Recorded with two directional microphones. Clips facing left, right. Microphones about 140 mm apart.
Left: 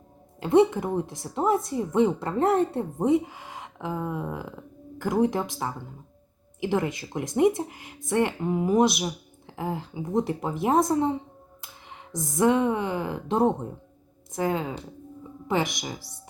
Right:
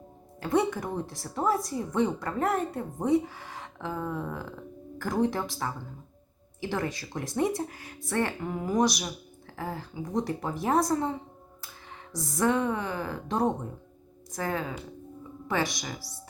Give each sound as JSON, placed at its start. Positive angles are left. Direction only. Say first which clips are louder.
{"t": 0.3, "sound": "a woman's voice", "louder": "left 7 dB", "side_deg": 25}